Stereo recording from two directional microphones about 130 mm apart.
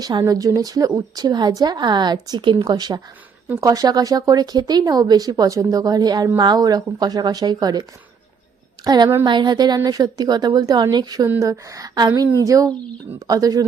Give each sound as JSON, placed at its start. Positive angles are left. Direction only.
{"t": 0.0, "sound": "a woman's voice", "side_deg": -30}